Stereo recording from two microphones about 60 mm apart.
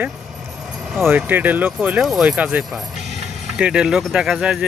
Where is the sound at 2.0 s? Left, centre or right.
Centre.